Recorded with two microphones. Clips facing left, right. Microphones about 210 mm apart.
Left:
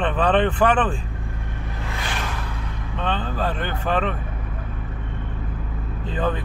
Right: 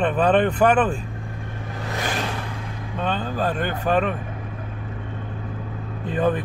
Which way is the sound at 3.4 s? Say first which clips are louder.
Right 4 dB; 45° right (ahead or behind).